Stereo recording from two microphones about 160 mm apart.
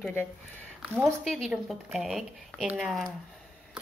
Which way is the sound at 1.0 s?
Centre (ahead or behind).